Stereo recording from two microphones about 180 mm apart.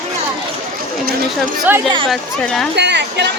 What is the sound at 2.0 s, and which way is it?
Speech, centre (ahead or behind).